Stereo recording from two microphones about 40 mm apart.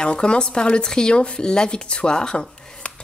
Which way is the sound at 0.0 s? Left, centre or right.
Left.